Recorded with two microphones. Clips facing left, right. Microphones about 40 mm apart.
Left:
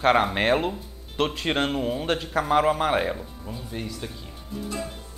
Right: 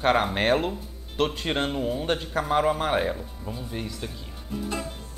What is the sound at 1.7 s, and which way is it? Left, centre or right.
Speech, left.